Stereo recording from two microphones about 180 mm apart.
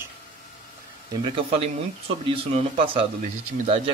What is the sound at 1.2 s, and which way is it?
A man's voice, 30° right (ahead or behind).